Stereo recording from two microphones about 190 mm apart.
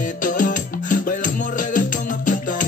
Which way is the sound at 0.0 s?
45° left (ahead or behind).